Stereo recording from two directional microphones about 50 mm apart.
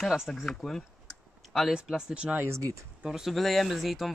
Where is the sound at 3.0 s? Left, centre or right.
Centre.